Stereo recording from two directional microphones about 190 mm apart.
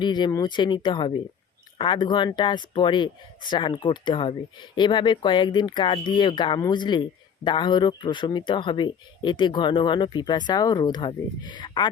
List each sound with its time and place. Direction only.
0.0 s speech: 25° left (ahead or behind)